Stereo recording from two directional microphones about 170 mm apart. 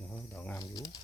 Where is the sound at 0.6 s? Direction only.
25° left (ahead or behind).